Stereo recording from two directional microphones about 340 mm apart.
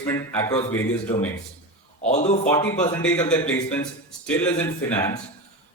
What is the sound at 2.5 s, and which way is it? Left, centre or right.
A man's voice, centre.